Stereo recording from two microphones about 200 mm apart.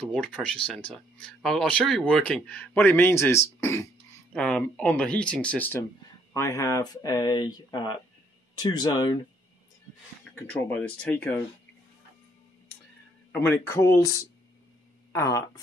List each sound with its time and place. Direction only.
0.1 s speech: 5° left (ahead or behind); by 9.2 s 20° left (ahead or behind)
10.3 s speech: 10° left (ahead or behind)
13.3 s speech: 10° left (ahead or behind)